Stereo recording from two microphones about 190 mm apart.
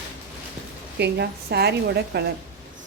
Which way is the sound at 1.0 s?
60° right (ahead or behind).